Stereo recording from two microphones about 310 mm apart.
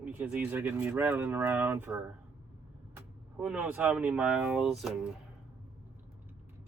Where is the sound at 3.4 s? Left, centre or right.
Centre.